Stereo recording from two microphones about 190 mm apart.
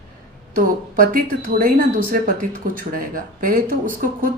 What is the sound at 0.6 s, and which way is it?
Speech, 45° right (ahead or behind).